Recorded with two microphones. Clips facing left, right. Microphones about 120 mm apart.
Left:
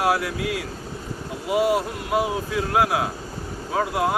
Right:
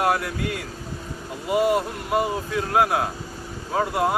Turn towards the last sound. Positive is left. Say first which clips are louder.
# even
turn(degrees=0)  # may be behind; listen again after turning